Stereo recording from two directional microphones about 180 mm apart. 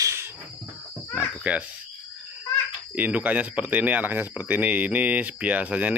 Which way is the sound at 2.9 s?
10° right (ahead or behind).